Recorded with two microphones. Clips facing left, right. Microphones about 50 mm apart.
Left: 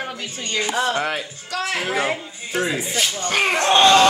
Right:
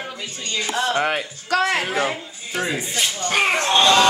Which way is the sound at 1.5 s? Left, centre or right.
Right.